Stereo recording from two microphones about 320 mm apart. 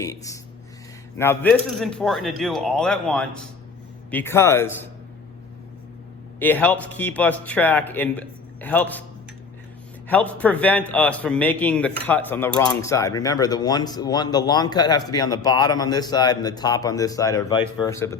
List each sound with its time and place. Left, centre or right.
0.0 s a man's voice: centre
6.4 s a man's voice: centre
10.1 s a man's voice: centre